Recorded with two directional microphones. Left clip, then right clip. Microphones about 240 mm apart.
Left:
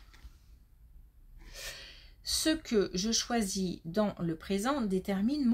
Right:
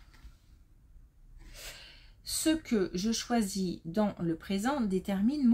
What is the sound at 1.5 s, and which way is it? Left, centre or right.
Speech, left.